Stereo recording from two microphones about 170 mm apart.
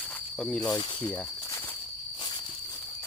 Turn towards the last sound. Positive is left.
turn(degrees=25)  # may be behind; listen again after turning